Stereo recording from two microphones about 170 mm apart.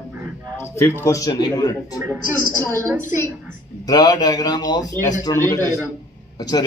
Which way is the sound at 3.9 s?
25° left (ahead or behind).